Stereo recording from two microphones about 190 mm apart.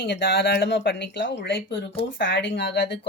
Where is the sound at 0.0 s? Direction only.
65° left (ahead or behind).